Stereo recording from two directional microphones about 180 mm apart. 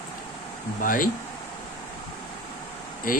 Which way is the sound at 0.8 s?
50° left (ahead or behind).